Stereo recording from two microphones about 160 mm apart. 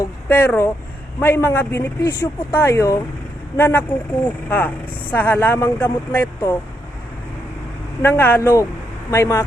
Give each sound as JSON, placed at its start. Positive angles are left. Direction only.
{"t": 0.0, "sound": "speech", "side_deg": 15}
{"t": 8.0, "sound": "speech", "side_deg": 15}